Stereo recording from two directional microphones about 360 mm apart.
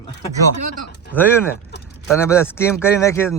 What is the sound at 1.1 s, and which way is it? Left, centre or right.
Speech, centre.